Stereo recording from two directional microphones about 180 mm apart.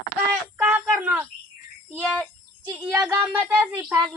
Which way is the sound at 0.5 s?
10° right (ahead or behind).